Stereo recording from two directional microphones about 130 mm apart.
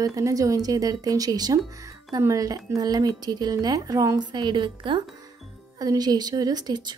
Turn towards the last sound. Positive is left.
turn(degrees=-30)  # may be behind; listen again after turning